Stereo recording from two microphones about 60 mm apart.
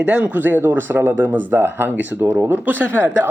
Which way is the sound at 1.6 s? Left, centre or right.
Right.